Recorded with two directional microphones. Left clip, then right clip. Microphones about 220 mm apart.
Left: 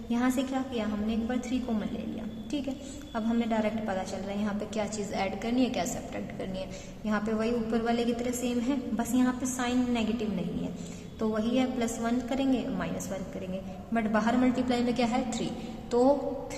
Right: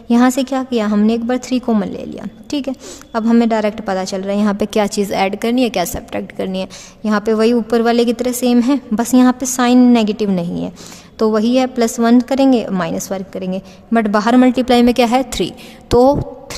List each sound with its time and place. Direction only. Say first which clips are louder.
0.1 s a woman's voice: right 15 dB; 45° right (ahead or behind)
3.1 s a woman's voice: right 16 dB; 45° right (ahead or behind)